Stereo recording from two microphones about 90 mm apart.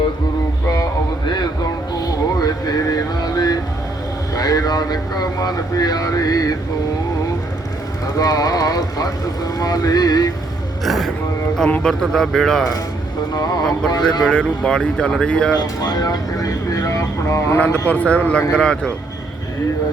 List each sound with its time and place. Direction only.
2.0 s a sound: 45° left (ahead or behind)
4.4 s vehicle: 45° left (ahead or behind)
5.4 s speech: 45° left (ahead or behind)
8.2 s speech: 45° left (ahead or behind)
10.8 s vehicle: centre (ahead or behind)
11.8 s speech: 5° left (ahead or behind)
13.3 s speech: 45° left (ahead or behind)
14.3 s speech: 10° left (ahead or behind)
15.6 s vehicle: 45° left (ahead or behind)
17.8 s speech: 15° left (ahead or behind)